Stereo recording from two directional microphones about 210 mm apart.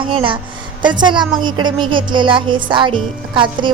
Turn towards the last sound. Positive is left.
turn(degrees=-25)  # may be behind; listen again after turning